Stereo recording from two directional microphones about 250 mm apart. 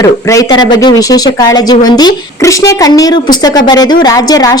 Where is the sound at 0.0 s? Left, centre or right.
Centre.